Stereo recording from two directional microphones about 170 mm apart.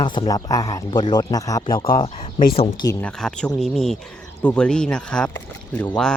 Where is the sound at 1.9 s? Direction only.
35° left (ahead or behind).